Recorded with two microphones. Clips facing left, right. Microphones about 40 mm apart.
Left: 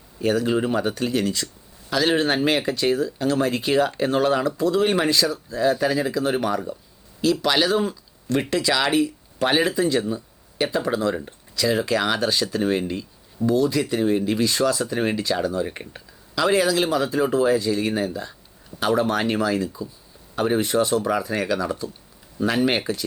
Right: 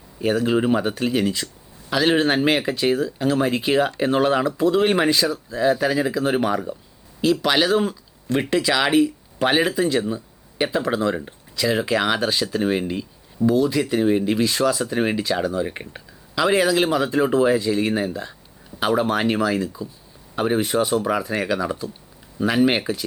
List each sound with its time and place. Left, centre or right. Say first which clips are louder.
0.2 s speech: right 1 dB; centre